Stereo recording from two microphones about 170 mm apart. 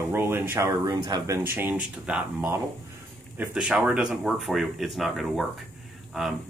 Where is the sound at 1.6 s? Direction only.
10° right (ahead or behind).